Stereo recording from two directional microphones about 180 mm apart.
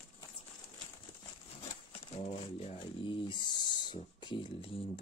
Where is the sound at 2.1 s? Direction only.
35° left (ahead or behind).